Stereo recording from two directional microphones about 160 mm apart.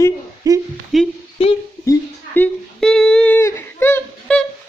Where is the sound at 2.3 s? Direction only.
5° left (ahead or behind).